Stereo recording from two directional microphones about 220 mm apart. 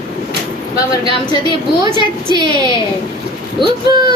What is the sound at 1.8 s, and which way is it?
Speech, 20° right (ahead or behind).